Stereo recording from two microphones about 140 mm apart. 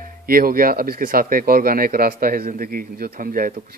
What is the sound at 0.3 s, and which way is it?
Speech, 90° right.